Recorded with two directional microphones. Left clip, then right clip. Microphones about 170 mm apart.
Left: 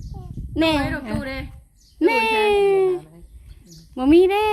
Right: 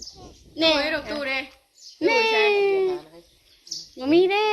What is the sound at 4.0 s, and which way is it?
Speech, 40° left (ahead or behind).